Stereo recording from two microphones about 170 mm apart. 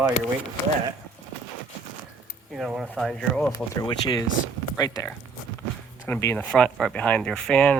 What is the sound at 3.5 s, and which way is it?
Speech, 20° left (ahead or behind).